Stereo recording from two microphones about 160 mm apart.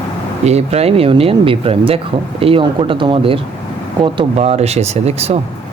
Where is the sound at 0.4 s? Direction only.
40° right (ahead or behind).